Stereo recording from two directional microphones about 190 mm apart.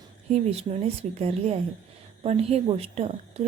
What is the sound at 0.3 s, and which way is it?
A woman's voice, 35° right (ahead or behind).